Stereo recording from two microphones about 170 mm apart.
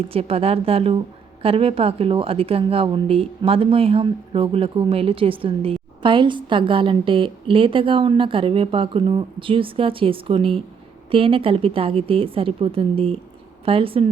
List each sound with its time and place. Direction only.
0.1 s a woman's voice: 35° right (ahead or behind)